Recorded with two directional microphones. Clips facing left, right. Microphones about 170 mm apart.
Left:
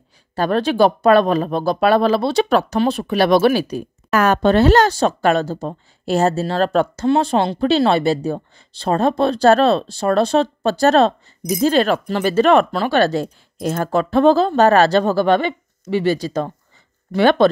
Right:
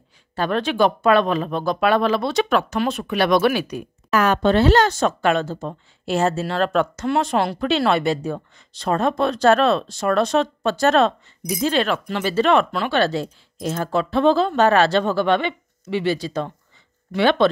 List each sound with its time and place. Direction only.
0.4 s speech: 35° left (ahead or behind)